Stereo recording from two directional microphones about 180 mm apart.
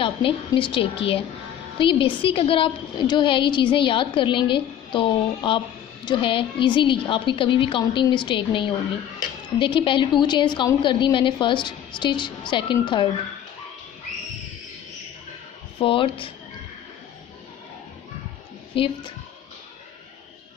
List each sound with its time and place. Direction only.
0.0 s a woman's voice: 30° left (ahead or behind)
15.8 s a woman's voice: 30° left (ahead or behind)
18.8 s a woman's voice: 30° left (ahead or behind)